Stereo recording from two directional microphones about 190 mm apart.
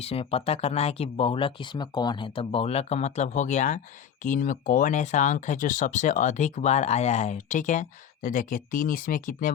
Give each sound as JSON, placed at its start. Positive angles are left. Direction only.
{"t": 0.0, "sound": "speech", "side_deg": 30}